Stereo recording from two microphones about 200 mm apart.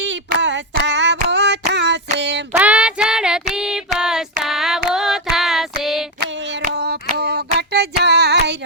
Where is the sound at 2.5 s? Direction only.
5° right (ahead or behind).